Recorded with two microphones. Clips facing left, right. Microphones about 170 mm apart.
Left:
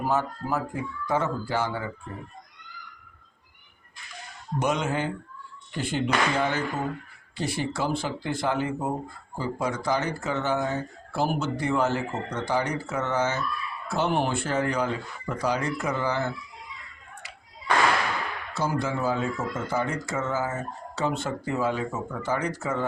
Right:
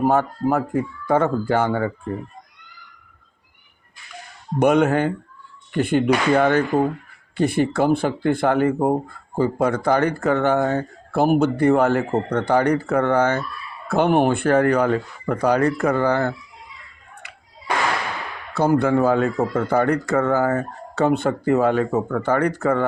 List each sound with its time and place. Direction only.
0.0 s speech: 55° right (ahead or behind)
4.6 s speech: 60° right (ahead or behind)
18.5 s speech: 60° right (ahead or behind)